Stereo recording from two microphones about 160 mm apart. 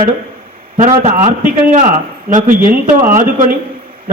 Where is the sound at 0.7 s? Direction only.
45° right (ahead or behind).